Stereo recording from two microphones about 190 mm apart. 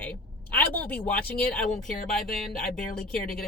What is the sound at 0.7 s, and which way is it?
Speech, 10° left (ahead or behind).